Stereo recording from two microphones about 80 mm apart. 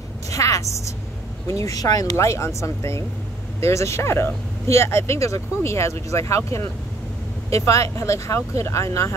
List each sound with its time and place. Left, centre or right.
0.3 s a woman's voice: left
2.1 s speech: left